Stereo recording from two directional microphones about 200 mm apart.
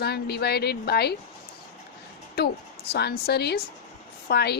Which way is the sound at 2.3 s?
55° left (ahead or behind).